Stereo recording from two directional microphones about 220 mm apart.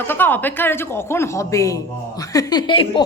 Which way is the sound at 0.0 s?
10° left (ahead or behind).